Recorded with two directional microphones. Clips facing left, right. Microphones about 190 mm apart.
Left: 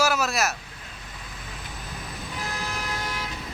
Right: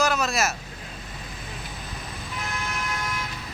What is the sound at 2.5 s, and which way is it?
Vehicle, 35° left (ahead or behind).